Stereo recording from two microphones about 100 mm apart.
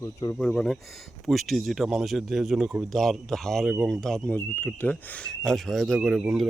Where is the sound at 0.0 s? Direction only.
35° left (ahead or behind).